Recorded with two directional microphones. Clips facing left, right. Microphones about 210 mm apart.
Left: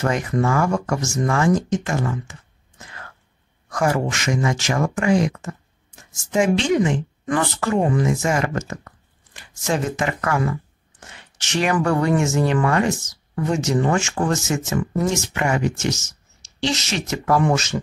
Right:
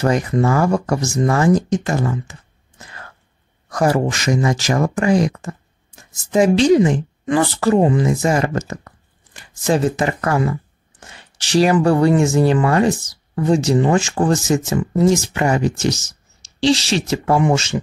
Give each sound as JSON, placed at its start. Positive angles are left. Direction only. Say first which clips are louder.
{"t": 0.0, "sound": "speech", "louder": "right 4 dB", "side_deg": -35}
{"t": 3.7, "sound": "speech", "louder": "right 4 dB", "side_deg": -35}